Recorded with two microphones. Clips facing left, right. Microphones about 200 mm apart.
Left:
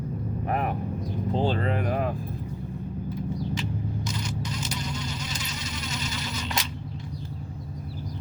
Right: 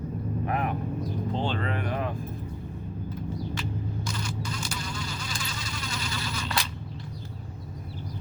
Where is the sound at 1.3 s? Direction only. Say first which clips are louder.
Left 6 dB; 40° left (ahead or behind).